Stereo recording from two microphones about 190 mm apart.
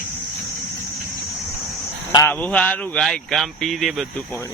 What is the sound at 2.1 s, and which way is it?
Speech, 15° left (ahead or behind).